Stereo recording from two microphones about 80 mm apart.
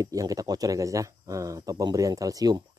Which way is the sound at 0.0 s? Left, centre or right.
Right.